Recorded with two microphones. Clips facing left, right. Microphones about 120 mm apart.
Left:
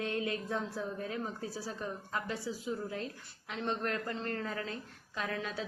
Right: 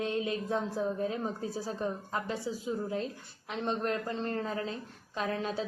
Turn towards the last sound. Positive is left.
turn(degrees=-30)  # may be behind; listen again after turning